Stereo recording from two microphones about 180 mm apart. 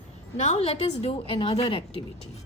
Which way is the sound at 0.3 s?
40° left (ahead or behind).